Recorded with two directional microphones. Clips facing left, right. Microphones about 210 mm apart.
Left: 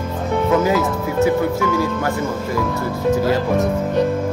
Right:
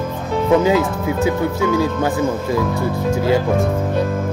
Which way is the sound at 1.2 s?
20° right (ahead or behind).